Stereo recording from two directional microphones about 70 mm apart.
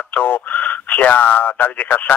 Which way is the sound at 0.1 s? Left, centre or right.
Left.